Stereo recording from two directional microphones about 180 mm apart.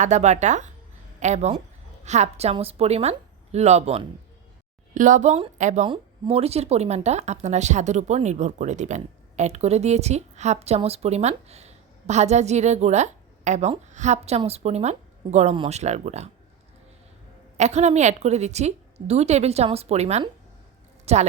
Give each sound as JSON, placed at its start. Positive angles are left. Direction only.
{"t": 0.0, "sound": "speech", "side_deg": -40}
{"t": 17.6, "sound": "speech", "side_deg": -40}